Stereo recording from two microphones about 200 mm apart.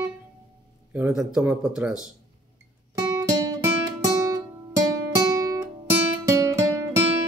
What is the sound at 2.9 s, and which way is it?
Music, 15° right (ahead or behind).